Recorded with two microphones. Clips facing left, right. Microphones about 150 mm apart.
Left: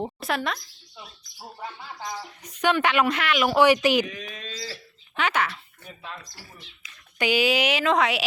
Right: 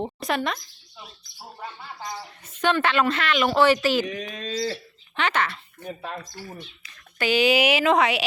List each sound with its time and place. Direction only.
0.0 s speech: 5° left (ahead or behind)
2.4 s a woman's voice: 15° left (ahead or behind)
4.0 s speech: 35° right (ahead or behind)
5.1 s a woman's voice: 10° left (ahead or behind)
5.8 s speech: 45° right (ahead or behind)
6.8 s speech: 15° left (ahead or behind)
7.4 s a woman's voice: 5° right (ahead or behind)